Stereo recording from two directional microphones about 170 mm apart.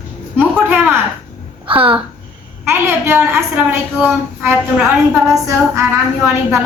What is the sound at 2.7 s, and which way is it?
A woman's voice, 15° right (ahead or behind).